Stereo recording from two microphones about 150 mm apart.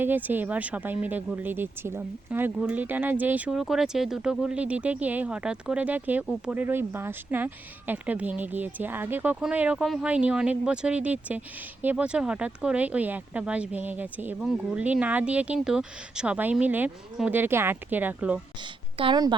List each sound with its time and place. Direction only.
0.0 s speech: 10° right (ahead or behind)
18.9 s a woman's voice: 30° right (ahead or behind)